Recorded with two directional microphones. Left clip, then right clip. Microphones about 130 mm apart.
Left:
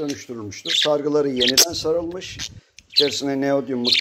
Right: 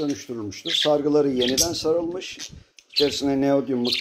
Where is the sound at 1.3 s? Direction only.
75° left (ahead or behind).